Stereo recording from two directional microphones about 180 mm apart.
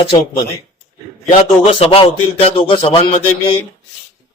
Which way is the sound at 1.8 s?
35° left (ahead or behind).